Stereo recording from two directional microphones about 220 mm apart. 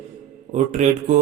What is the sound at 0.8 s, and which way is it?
Speech, 35° right (ahead or behind).